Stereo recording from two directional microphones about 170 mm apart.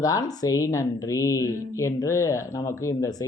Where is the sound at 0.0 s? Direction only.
20° left (ahead or behind).